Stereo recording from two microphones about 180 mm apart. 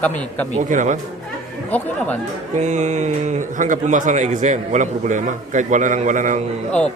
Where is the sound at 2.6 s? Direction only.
40° right (ahead or behind).